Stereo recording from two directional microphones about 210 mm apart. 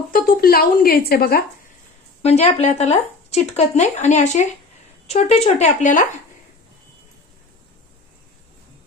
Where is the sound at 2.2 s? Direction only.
30° left (ahead or behind).